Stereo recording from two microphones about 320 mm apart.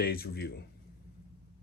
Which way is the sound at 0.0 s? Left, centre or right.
Left.